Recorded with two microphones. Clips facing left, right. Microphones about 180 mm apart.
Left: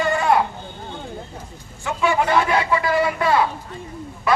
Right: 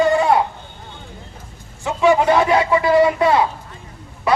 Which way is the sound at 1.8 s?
20° right (ahead or behind).